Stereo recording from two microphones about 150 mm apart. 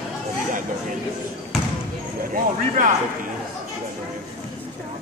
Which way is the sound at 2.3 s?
65° right (ahead or behind).